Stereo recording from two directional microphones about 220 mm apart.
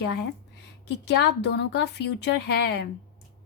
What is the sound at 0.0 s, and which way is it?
A woman's voice, 50° left (ahead or behind).